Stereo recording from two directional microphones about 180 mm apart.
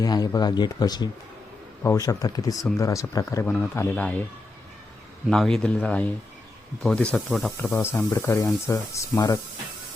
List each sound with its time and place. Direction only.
0.0 s speech: 20° left (ahead or behind)
5.3 s speech: 5° left (ahead or behind); by 9.4 s 20° left (ahead or behind)